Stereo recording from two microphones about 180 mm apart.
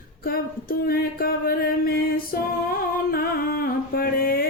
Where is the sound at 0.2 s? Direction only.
55° left (ahead or behind).